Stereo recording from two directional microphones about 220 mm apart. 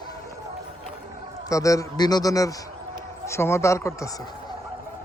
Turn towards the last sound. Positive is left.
turn(degrees=15)  # may be behind; listen again after turning